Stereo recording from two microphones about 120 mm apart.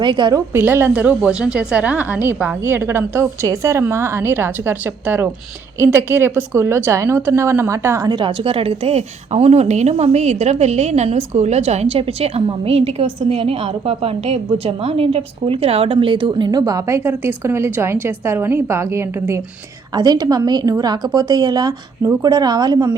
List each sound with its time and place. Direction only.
0.0 s a woman's voice: 40° right (ahead or behind)
0.5 s a woman's voice: 20° right (ahead or behind)
8.2 s a woman's voice: 50° right (ahead or behind); by 19.4 s 20° right (ahead or behind)
20.0 s a woman's voice: 35° right (ahead or behind)